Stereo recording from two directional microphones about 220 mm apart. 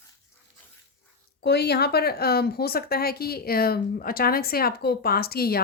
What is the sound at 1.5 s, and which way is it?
A woman's voice, 45° left (ahead or behind).